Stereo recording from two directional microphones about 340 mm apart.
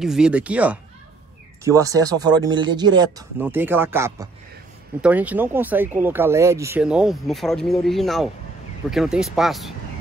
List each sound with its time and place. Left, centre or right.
0.0 s speech: centre